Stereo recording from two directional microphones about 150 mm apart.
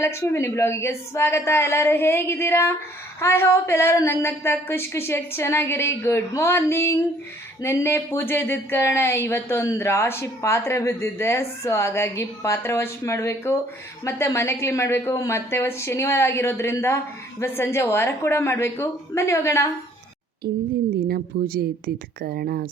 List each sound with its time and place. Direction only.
0.0 s speech: 15° left (ahead or behind)
20.4 s speech: 85° right